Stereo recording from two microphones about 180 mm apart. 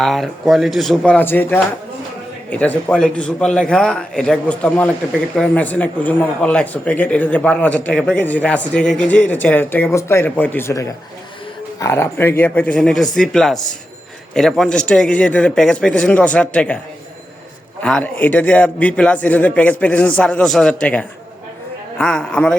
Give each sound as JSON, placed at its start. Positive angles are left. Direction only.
{"t": 0.0, "sound": "a man's voice", "side_deg": 0}
{"t": 17.8, "sound": "a man's voice", "side_deg": 5}